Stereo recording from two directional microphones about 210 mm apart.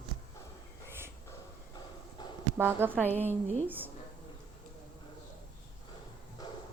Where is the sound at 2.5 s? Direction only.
10° right (ahead or behind).